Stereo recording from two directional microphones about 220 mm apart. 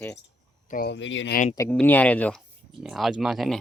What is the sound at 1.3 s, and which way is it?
Speech, 35° left (ahead or behind).